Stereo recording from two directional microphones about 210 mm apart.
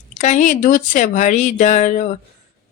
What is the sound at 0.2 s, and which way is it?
Speech, 35° left (ahead or behind).